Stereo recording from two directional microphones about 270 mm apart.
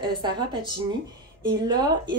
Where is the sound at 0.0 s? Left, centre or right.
Centre.